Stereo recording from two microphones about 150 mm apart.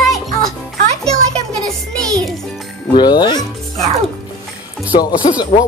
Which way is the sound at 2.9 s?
30° left (ahead or behind).